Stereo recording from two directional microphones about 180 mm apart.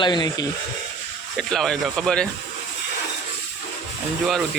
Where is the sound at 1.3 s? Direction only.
Centre (ahead or behind).